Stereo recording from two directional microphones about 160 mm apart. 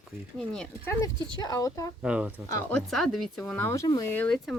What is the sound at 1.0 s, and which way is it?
Speech, 25° left (ahead or behind).